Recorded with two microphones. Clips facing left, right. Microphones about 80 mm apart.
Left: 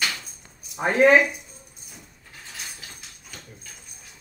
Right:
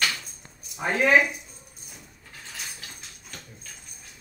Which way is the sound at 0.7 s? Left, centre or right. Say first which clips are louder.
Left 4 dB; left.